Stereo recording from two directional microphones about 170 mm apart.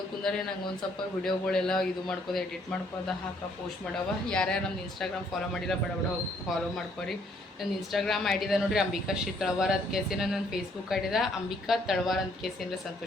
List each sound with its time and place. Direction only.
0.2 s a woman's voice: 5° left (ahead or behind)
4.3 s a woman's voice: 5° left (ahead or behind)
7.6 s a woman's voice: centre (ahead or behind)